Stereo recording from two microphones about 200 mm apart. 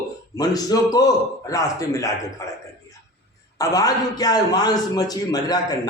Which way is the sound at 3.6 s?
20° left (ahead or behind).